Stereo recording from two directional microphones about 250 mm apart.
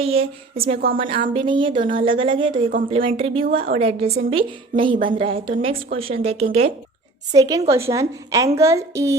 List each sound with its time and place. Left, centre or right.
0.0 s speech: right
2.6 s speech: right
3.0 s a woman's voice: right